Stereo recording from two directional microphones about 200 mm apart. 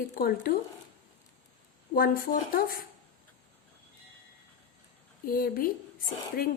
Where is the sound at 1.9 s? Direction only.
45° left (ahead or behind).